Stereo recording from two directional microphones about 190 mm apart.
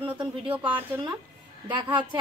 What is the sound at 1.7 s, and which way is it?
Speech, 25° right (ahead or behind).